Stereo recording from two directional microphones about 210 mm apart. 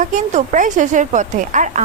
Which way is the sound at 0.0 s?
35° right (ahead or behind).